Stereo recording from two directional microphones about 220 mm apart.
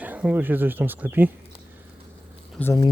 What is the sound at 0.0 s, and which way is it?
Speech, 5° right (ahead or behind).